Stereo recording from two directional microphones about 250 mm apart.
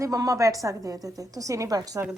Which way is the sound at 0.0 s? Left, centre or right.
Centre.